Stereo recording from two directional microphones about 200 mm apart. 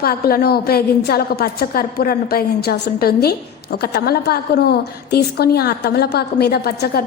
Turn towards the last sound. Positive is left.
turn(degrees=50)  # may be behind; listen again after turning